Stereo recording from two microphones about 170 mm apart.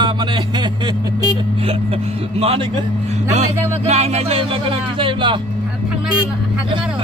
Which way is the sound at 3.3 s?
40° right (ahead or behind).